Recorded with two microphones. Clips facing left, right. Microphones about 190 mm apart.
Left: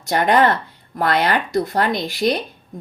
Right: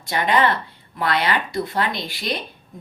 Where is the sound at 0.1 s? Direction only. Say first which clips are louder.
Left 4 dB; 45° left (ahead or behind).